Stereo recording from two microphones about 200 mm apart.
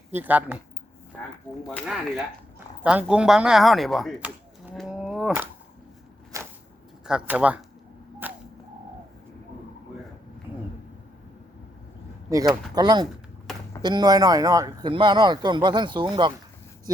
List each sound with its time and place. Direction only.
0.1 s speech: 10° right (ahead or behind)
1.6 s speech: centre (ahead or behind)
6.3 s a sound: 15° right (ahead or behind)
7.0 s speech: 5° right (ahead or behind)
8.2 s whip: 10° right (ahead or behind)
12.3 s speech: 15° right (ahead or behind)